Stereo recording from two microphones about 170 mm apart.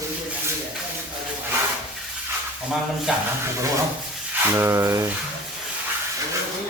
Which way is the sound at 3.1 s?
5° right (ahead or behind).